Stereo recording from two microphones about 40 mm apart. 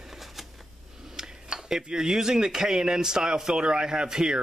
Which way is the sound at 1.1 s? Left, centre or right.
Centre.